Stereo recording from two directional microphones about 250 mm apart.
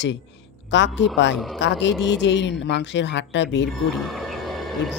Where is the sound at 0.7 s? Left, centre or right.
Left.